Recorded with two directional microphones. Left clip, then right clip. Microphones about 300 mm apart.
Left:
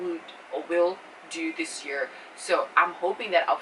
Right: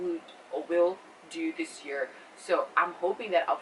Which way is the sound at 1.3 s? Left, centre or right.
Centre.